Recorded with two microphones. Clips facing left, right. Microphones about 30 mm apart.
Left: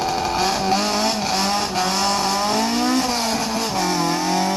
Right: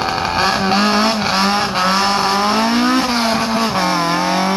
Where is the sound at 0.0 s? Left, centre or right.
Right.